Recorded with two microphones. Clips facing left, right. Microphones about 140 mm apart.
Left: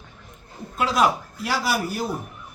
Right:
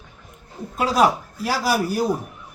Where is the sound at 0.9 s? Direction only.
35° right (ahead or behind).